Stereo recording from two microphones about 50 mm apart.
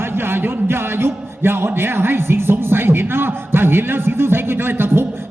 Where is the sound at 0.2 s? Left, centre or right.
Right.